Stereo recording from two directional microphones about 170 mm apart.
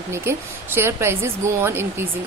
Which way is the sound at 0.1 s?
15° right (ahead or behind).